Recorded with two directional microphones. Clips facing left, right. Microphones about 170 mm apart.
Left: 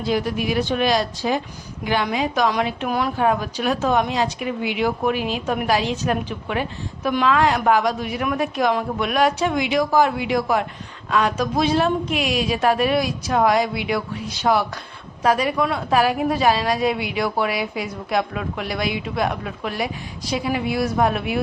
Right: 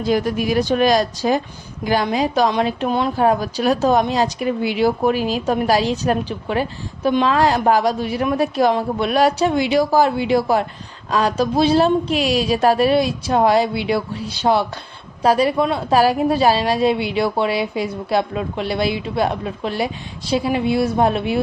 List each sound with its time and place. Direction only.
0.0 s a woman's voice: 45° right (ahead or behind); by 21.4 s 30° right (ahead or behind)